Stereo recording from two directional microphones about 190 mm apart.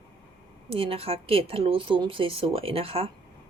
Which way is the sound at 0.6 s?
30° right (ahead or behind).